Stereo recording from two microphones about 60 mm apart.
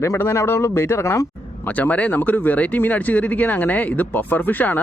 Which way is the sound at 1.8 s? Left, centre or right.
Left.